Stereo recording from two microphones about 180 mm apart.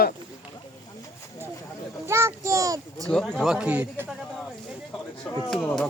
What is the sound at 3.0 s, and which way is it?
Speech, 5° left (ahead or behind).